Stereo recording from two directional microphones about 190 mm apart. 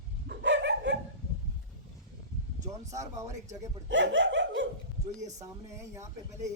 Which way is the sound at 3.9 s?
75° right (ahead or behind).